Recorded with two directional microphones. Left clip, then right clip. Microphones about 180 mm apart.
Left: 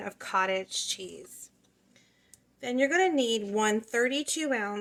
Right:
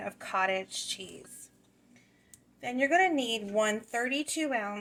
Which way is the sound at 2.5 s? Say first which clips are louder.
Even; 45° left (ahead or behind).